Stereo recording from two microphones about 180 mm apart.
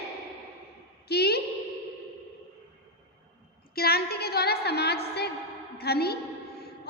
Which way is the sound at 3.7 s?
60° left (ahead or behind).